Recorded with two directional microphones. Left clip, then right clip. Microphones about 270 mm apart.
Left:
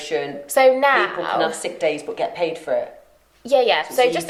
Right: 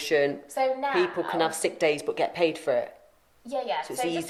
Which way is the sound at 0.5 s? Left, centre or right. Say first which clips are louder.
Left 14 dB; left.